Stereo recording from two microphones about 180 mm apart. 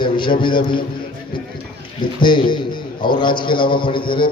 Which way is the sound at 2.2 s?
25° left (ahead or behind).